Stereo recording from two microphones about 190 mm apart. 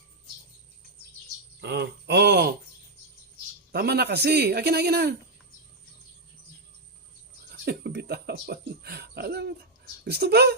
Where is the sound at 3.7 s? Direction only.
55° right (ahead or behind).